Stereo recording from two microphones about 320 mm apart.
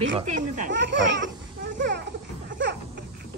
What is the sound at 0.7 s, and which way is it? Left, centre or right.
Speech, right.